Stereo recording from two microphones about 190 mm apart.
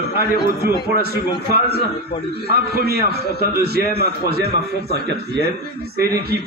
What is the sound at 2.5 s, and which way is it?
A man's voice, 55° right (ahead or behind).